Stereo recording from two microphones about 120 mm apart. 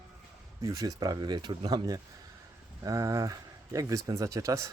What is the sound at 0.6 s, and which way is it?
Speech, 30° right (ahead or behind).